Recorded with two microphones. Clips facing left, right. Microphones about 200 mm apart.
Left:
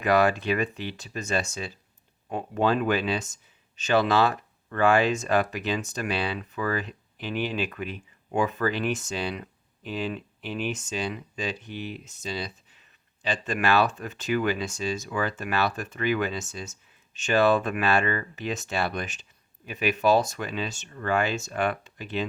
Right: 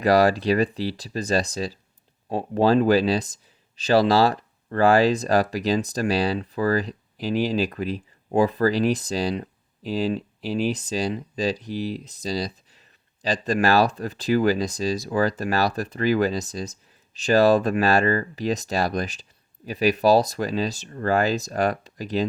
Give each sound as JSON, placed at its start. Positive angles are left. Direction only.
{"t": 0.0, "sound": "speech", "side_deg": -35}